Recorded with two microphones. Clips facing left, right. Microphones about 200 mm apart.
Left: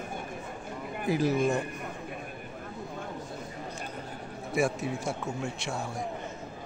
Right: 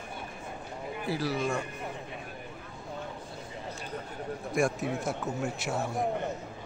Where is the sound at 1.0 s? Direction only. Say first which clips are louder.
Left 5 dB; 20° left (ahead or behind).